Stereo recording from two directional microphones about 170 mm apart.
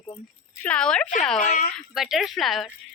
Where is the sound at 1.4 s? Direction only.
45° left (ahead or behind).